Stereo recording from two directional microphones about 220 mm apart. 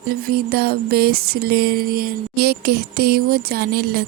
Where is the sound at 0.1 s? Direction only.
45° right (ahead or behind).